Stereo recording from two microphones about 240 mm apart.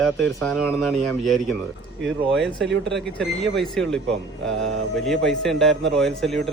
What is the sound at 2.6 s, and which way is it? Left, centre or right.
Speech, right.